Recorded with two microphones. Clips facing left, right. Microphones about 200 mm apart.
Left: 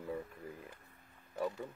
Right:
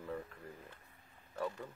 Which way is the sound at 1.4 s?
10° left (ahead or behind).